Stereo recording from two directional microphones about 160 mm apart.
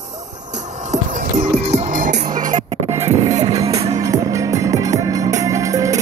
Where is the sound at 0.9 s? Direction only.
55° right (ahead or behind).